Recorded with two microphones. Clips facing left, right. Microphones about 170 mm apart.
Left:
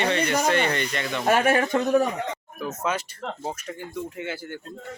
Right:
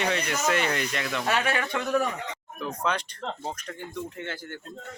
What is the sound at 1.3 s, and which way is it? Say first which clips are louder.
Speech: left 8 dB; 45° left (ahead or behind).